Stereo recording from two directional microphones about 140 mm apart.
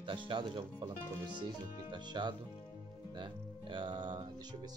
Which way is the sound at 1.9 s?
35° right (ahead or behind).